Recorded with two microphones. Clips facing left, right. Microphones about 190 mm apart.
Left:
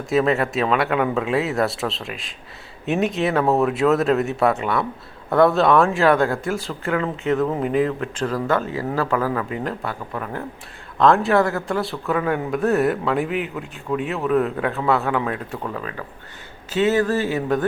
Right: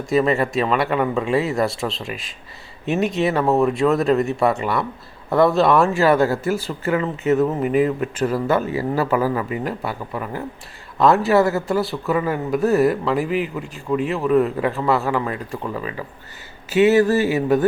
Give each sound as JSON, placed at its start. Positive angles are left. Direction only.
{"t": 0.1, "sound": "speech", "side_deg": 0}